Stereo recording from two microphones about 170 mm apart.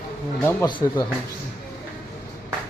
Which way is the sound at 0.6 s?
25° left (ahead or behind).